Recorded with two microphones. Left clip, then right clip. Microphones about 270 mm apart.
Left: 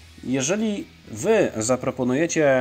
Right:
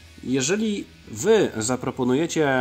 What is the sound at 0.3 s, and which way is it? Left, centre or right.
Speech, centre.